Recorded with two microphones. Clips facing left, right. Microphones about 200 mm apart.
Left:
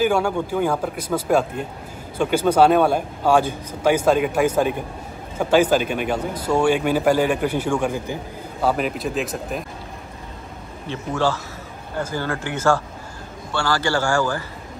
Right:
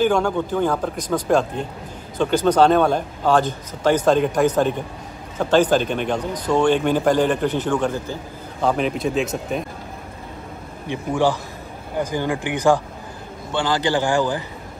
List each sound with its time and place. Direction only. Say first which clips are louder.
0.0 s speech: right 1 dB; 10° left (ahead or behind)
10.9 s a man's voice: right 2 dB; 15° right (ahead or behind)